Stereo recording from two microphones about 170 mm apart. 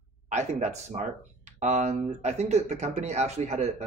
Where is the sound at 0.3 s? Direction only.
40° right (ahead or behind).